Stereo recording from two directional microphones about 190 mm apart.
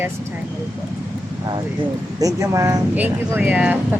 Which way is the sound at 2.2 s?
15° right (ahead or behind).